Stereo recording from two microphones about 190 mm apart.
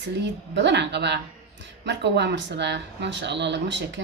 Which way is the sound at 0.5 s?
65° right (ahead or behind).